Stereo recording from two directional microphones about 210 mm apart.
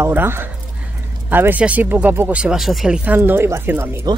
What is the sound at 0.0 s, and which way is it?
Speech, 10° right (ahead or behind).